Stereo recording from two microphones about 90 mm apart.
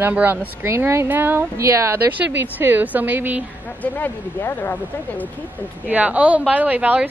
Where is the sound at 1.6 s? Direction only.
35° right (ahead or behind).